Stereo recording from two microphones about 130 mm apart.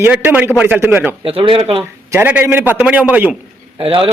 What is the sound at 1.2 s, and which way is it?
Speech, 45° right (ahead or behind).